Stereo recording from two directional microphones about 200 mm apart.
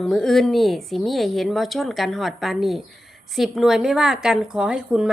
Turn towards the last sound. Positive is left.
turn(degrees=-5)  # may be behind; listen again after turning